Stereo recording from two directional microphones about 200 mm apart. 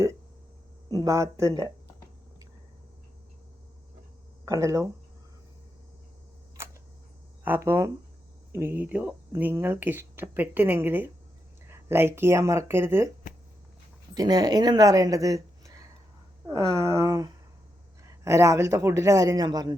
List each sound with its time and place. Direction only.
0.9 s speech: 15° right (ahead or behind)
4.4 s speech: 15° right (ahead or behind)
6.6 s single-lens reflex camera: 15° right (ahead or behind)
7.4 s speech: 10° right (ahead or behind)
14.1 s speech: 20° right (ahead or behind)